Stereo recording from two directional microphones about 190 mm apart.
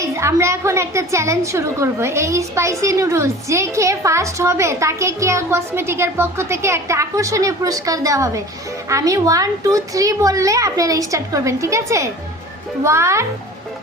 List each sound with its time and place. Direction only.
0.0 s a woman's voice: 15° right (ahead or behind)